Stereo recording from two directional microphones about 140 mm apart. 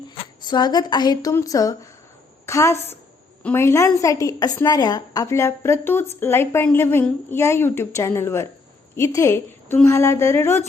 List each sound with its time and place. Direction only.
0.4 s a woman's voice: 30° left (ahead or behind)